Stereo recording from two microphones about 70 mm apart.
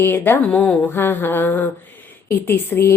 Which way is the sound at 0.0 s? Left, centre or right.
Left.